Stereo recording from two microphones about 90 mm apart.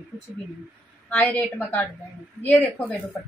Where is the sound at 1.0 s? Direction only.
20° left (ahead or behind).